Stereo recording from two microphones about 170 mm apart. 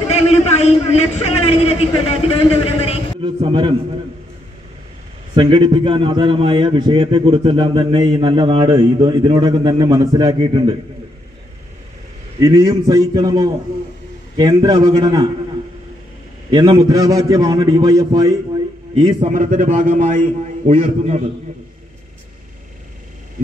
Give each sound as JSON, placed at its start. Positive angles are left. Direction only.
{"t": 0.1, "sound": "a man's voice", "side_deg": 40}
{"t": 3.3, "sound": "a man's voice", "side_deg": -30}
{"t": 5.3, "sound": "a man's voice", "side_deg": -30}
{"t": 12.4, "sound": "a man's voice", "side_deg": -20}
{"t": 16.4, "sound": "a man's voice", "side_deg": -25}
{"t": 19.2, "sound": "a man's voice", "side_deg": -45}